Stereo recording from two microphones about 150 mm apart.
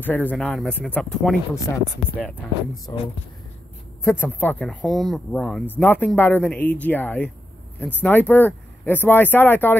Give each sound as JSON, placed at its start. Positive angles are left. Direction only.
{"t": 0.0, "sound": "speech", "side_deg": 10}
{"t": 2.9, "sound": "speech", "side_deg": 20}